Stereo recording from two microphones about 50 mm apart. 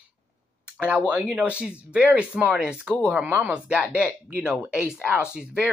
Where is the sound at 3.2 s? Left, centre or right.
Right.